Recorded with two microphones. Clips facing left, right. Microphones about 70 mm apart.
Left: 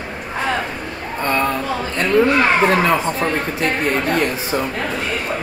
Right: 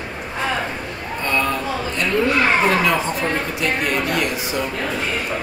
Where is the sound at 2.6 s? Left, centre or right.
Left.